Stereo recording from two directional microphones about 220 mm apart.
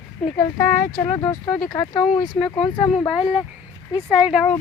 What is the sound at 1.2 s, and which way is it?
Speech, 5° left (ahead or behind).